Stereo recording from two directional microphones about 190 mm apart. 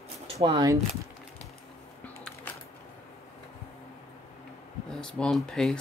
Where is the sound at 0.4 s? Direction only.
30° right (ahead or behind).